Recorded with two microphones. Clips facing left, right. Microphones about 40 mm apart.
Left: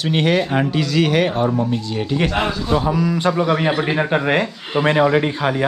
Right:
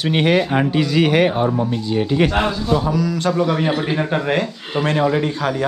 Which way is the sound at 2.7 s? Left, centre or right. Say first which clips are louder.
Left 2 dB; centre.